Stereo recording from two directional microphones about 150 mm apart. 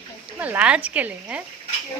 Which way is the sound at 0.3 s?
10° right (ahead or behind).